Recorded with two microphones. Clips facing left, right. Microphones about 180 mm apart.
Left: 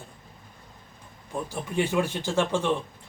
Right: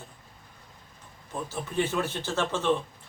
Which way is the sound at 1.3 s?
15° left (ahead or behind).